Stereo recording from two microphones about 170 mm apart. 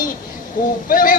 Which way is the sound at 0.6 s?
50° left (ahead or behind).